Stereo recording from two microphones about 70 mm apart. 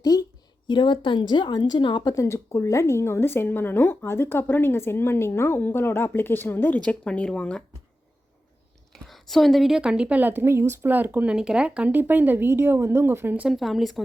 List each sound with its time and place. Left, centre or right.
0.0 s a sound: left
0.7 s a woman's voice: left
2.1 s speech: left
6.7 s speech: centre
8.9 s a woman's voice: centre; by 11.3 s right
11.3 s a woman's voice: centre; by 13.4 s right
13.5 s speech: centre